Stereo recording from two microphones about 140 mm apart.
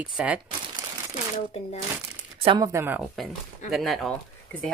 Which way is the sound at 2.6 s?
20° right (ahead or behind).